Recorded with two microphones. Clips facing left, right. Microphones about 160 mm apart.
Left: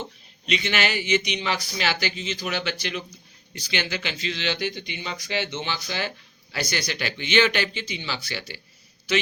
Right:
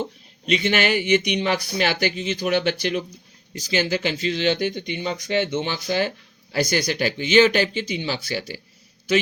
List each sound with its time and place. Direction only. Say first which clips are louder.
0.4 s speech: right 5 dB; 50° right (ahead or behind)